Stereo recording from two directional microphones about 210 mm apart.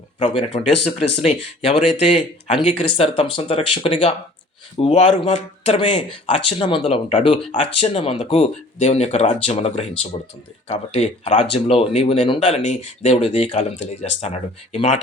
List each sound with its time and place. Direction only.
0.2 s speech: 25° left (ahead or behind)